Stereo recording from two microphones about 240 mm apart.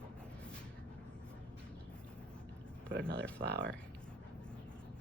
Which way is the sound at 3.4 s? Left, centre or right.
Right.